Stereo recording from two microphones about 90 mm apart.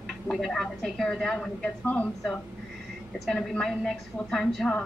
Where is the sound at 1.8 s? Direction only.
15° left (ahead or behind).